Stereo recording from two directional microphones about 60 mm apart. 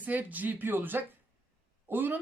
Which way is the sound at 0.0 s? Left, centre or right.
Right.